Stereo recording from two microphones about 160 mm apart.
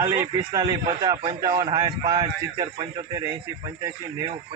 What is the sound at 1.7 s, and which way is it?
Speech, 40° right (ahead or behind).